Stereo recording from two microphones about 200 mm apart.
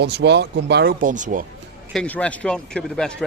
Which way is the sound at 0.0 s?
60° right (ahead or behind).